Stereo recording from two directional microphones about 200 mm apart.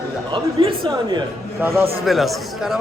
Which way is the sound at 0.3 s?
25° right (ahead or behind).